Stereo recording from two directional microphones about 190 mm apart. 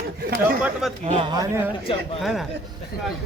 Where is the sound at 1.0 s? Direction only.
30° right (ahead or behind).